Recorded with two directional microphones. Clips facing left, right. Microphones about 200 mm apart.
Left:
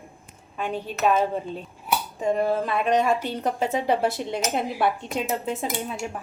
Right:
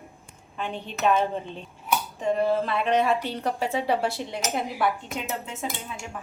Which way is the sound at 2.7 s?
15° left (ahead or behind).